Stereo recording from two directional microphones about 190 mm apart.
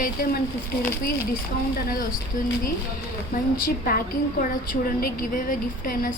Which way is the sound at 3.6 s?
50° left (ahead or behind).